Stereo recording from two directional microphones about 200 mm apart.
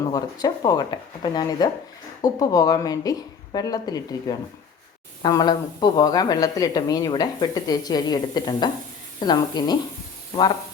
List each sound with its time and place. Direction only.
0.1 s speech: 20° left (ahead or behind)